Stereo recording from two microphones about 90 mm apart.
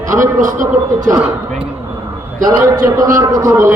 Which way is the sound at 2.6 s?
40° right (ahead or behind).